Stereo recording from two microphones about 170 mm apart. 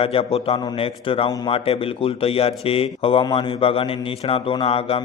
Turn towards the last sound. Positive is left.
turn(degrees=35)  # may be behind; listen again after turning